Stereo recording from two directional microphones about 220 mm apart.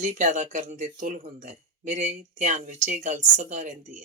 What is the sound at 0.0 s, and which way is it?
Speech, 35° right (ahead or behind).